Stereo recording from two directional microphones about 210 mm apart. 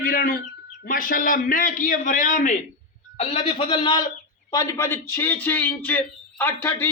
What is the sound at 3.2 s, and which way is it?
A man's voice, 25° left (ahead or behind).